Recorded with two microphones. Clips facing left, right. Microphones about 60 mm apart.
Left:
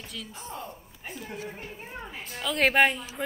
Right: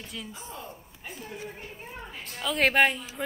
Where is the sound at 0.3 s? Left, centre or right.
Left.